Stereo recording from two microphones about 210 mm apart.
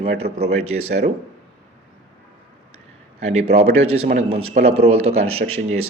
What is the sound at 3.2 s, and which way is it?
Speech, 30° right (ahead or behind).